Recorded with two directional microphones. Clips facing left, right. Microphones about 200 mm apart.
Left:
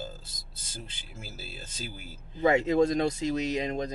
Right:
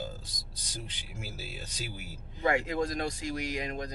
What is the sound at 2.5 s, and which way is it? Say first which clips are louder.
Speech: left 6 dB; 25° left (ahead or behind).